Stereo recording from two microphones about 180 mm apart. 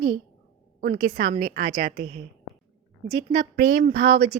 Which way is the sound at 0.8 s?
55° right (ahead or behind).